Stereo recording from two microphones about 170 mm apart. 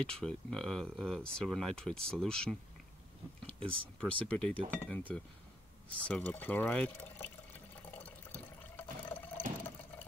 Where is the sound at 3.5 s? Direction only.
30° right (ahead or behind).